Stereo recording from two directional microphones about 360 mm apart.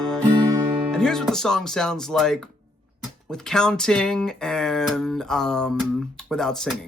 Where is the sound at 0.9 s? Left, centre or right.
Centre.